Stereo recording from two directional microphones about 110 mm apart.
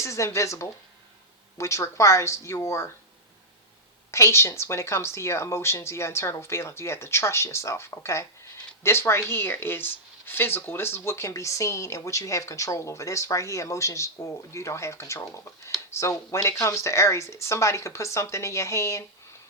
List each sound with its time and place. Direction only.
0.0 s speech: 25° left (ahead or behind)
4.1 s speech: 25° left (ahead or behind)